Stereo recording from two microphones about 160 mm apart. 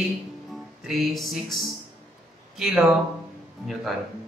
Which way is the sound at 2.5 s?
5° right (ahead or behind).